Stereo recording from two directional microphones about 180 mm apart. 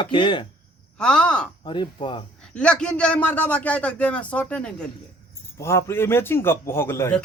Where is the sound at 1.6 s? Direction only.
25° left (ahead or behind).